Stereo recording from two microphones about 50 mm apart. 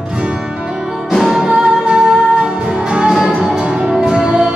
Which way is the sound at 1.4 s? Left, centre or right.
Centre.